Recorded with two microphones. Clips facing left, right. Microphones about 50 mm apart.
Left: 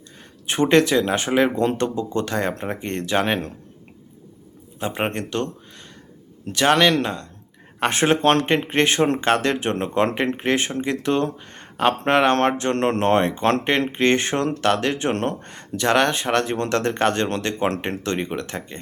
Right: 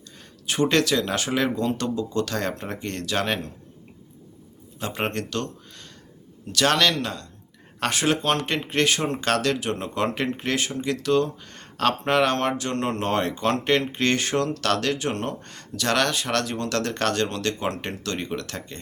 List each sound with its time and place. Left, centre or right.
0.4 s speech: left
1.5 s speech: left
4.8 s speech: centre
6.5 s speech: left
8.4 s speech: left
15.1 s speech: left
15.4 s speech: left